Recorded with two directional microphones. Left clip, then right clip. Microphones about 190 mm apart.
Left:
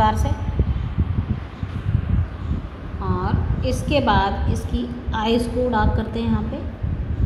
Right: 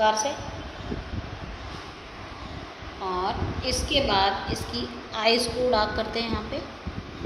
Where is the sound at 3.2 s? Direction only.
5° right (ahead or behind).